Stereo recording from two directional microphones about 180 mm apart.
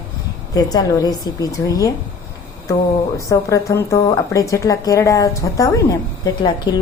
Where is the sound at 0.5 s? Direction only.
20° left (ahead or behind).